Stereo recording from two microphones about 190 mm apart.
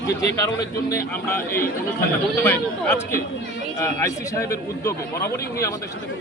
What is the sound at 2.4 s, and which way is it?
A man's voice, 10° left (ahead or behind).